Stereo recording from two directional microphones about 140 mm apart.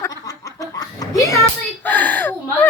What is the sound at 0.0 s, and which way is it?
Snicker, 25° left (ahead or behind).